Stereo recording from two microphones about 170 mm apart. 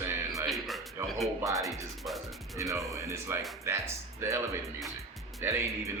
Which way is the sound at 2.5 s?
20° right (ahead or behind).